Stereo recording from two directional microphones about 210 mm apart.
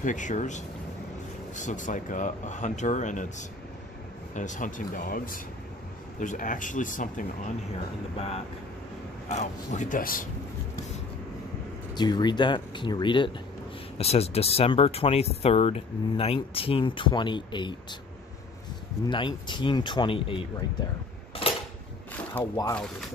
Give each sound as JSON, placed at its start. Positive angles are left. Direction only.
{"t": 0.0, "sound": "speech", "side_deg": 35}
{"t": 9.3, "sound": "speech", "side_deg": 35}
{"t": 11.9, "sound": "speech", "side_deg": 20}
{"t": 19.0, "sound": "speech", "side_deg": 20}
{"t": 21.4, "sound": "a sound", "side_deg": 25}
{"t": 22.3, "sound": "speech", "side_deg": 15}